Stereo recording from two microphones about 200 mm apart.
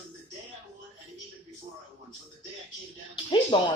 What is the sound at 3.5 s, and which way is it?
Speech, 25° left (ahead or behind).